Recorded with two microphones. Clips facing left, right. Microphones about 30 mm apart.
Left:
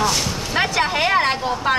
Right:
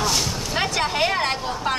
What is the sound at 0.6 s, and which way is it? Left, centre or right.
Speech, centre.